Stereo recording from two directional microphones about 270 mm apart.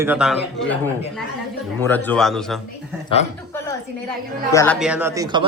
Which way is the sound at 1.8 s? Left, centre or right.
Centre.